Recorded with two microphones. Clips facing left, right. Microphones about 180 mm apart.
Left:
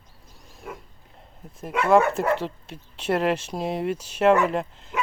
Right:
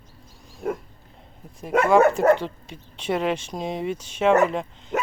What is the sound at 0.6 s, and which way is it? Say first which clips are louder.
Pig: right 11 dB; 50° right (ahead or behind).